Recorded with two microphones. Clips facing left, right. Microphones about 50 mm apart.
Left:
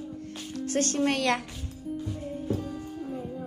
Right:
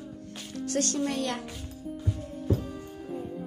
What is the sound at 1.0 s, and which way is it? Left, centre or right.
Speech, left.